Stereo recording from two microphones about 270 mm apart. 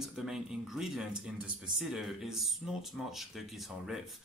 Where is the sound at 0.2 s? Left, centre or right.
Centre.